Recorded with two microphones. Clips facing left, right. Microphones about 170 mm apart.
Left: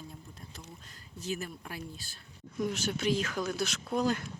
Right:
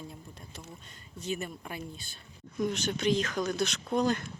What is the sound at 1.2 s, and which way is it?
Speech, centre (ahead or behind).